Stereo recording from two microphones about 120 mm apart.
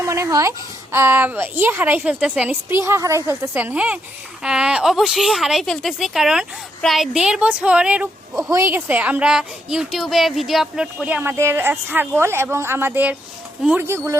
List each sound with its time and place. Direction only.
0.0 s a woman's voice: 25° right (ahead or behind); by 8.4 s 10° right (ahead or behind)
8.4 s speech: 25° right (ahead or behind)
8.7 s a woman's voice: 15° right (ahead or behind)
13.8 s speech: 20° right (ahead or behind)